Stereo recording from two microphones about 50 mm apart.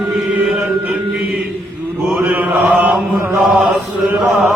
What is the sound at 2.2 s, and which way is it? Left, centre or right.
Chant, right.